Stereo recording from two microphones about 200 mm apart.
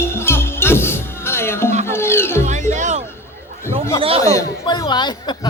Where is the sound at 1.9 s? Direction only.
10° left (ahead or behind).